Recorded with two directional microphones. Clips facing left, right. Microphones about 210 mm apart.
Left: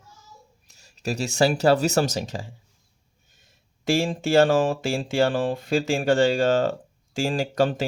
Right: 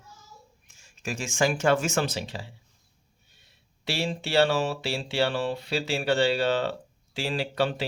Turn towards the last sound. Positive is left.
turn(degrees=45)  # may be behind; listen again after turning